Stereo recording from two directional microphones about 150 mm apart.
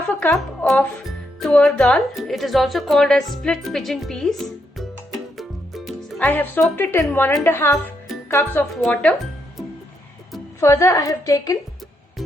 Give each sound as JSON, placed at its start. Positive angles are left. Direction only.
{"t": 0.2, "sound": "a woman's voice", "side_deg": 10}
{"t": 5.4, "sound": "music", "side_deg": 0}
{"t": 6.1, "sound": "a woman's voice", "side_deg": 10}
{"t": 8.7, "sound": "a woman's voice", "side_deg": 5}
{"t": 10.6, "sound": "a woman's voice", "side_deg": 20}